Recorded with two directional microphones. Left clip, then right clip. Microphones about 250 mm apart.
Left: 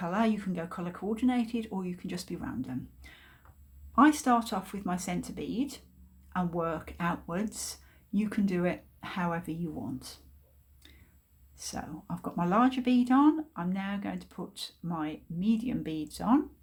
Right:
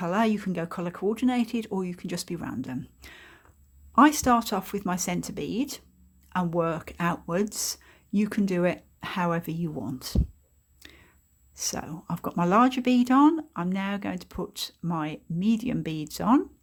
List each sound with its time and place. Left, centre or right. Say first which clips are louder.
0.0 s speech: right 5 dB; right
10.8 s a sound: right 8 dB; right
11.5 s speech: right 7 dB; right